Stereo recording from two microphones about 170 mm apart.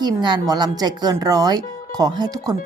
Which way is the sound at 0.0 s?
25° right (ahead or behind).